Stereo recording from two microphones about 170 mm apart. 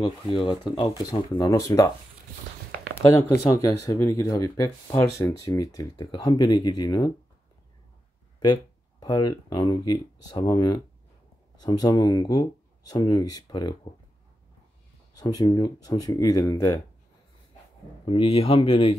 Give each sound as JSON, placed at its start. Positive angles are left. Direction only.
{"t": 0.3, "sound": "speech", "side_deg": 30}
{"t": 2.9, "sound": "speech", "side_deg": 20}
{"t": 9.0, "sound": "speech", "side_deg": 25}
{"t": 15.1, "sound": "speech", "side_deg": 20}
{"t": 18.0, "sound": "speech", "side_deg": 30}